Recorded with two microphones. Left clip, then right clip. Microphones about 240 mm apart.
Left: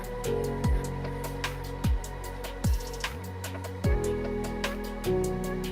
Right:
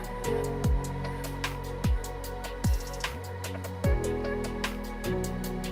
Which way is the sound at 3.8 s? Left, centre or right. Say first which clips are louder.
Left 1 dB; centre.